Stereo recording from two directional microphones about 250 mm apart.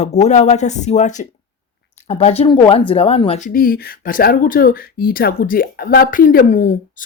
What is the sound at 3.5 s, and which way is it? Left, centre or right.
Speech, left.